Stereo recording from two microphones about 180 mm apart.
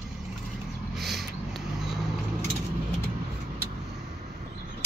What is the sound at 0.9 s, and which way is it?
Vehicle, centre (ahead or behind).